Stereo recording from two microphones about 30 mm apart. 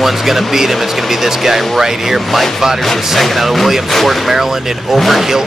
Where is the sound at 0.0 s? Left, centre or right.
Centre.